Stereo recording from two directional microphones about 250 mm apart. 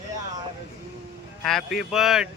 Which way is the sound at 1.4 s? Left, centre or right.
Centre.